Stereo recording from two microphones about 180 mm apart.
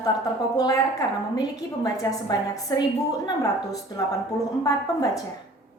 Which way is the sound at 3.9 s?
20° left (ahead or behind).